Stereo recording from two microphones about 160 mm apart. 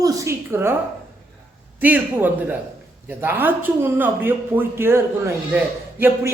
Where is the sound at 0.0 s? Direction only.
15° right (ahead or behind).